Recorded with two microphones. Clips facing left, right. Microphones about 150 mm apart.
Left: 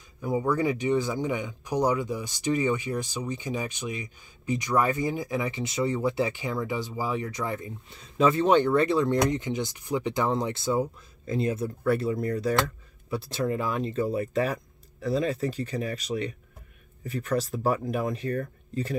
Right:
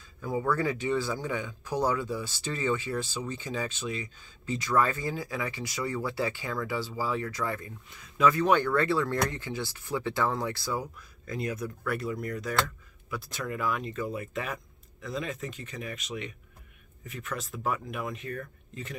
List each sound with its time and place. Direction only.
0.2 s speech: 15° left (ahead or behind); by 18.9 s 35° left (ahead or behind)